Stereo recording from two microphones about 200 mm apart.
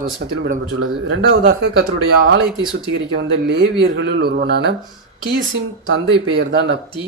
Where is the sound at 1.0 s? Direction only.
65° right (ahead or behind).